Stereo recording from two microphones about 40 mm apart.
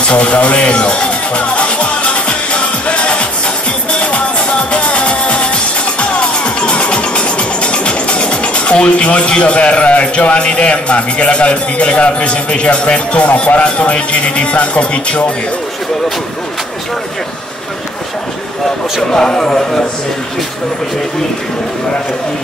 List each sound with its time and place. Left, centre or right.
0.0 s music: left
13.6 s speech: left
19.1 s speech: centre